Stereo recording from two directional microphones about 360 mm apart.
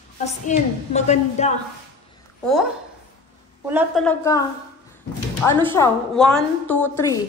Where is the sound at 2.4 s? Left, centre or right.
Centre.